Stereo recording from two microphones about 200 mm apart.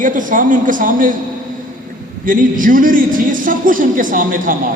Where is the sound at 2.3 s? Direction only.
40° right (ahead or behind).